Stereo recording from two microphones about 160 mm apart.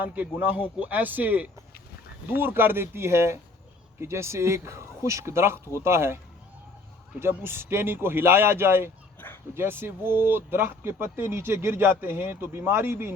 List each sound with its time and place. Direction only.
0.0 s speech: 10° right (ahead or behind)
7.2 s speech: 15° right (ahead or behind)
9.2 s dog: 10° left (ahead or behind)
9.6 s speech: 15° right (ahead or behind)